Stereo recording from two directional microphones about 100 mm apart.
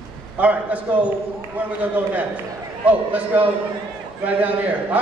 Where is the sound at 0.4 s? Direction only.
15° right (ahead or behind).